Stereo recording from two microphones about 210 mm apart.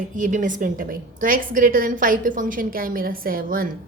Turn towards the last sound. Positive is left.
turn(degrees=-40)  # may be behind; listen again after turning